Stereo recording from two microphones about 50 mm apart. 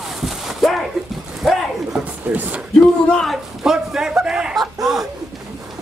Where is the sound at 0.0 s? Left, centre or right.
Centre.